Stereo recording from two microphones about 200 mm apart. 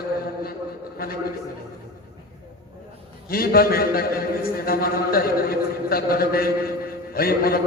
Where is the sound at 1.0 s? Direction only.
50° left (ahead or behind).